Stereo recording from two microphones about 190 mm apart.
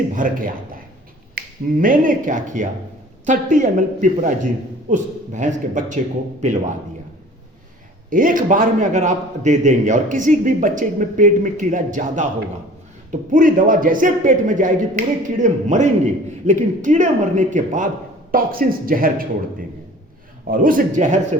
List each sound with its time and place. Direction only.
0.2 s a man's voice: 45° right (ahead or behind)
8.1 s a man's voice: 45° right (ahead or behind)
20.5 s a man's voice: 45° right (ahead or behind)